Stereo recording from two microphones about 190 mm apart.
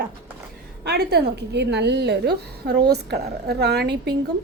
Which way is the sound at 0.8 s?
60° right (ahead or behind).